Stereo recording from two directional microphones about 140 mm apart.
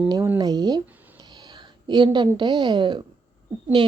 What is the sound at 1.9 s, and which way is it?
A woman's voice, 30° right (ahead or behind).